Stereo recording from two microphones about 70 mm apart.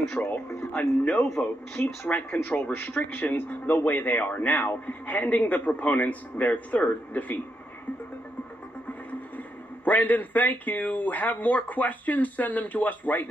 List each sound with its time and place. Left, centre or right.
0.2 s speech: centre
2.0 s speech: left
9.8 s speech: left